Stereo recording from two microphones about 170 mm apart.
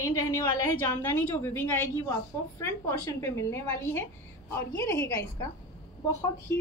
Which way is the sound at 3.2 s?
15° left (ahead or behind).